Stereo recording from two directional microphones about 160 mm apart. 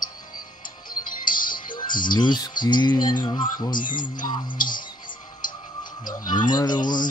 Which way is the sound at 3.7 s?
55° left (ahead or behind).